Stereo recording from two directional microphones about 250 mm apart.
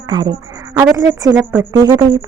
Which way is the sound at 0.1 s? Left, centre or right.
Centre.